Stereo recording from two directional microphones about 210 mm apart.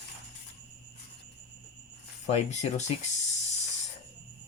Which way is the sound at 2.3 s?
30° left (ahead or behind).